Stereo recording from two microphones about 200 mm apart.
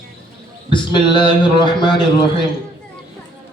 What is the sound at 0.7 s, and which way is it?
A man's voice, 25° left (ahead or behind).